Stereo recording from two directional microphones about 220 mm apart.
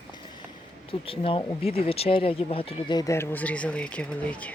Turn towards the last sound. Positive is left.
turn(degrees=5)  # may be behind; listen again after turning